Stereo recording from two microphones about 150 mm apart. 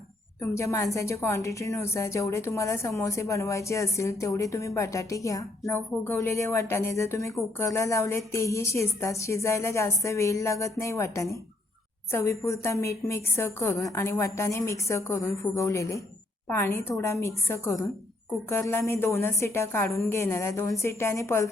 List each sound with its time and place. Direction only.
0.5 s a woman's voice: 20° left (ahead or behind)